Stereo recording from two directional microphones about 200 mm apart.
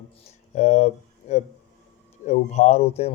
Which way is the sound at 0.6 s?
35° left (ahead or behind).